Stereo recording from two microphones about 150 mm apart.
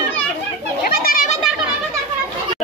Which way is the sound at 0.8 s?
70° left (ahead or behind).